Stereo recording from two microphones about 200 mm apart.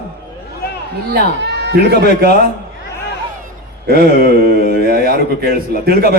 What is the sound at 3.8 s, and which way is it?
Speech, 50° right (ahead or behind).